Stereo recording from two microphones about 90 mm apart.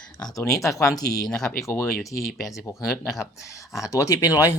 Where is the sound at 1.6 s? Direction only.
30° left (ahead or behind).